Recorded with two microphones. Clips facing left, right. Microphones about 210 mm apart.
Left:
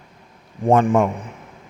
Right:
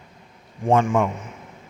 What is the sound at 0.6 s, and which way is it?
Speech, 35° left (ahead or behind).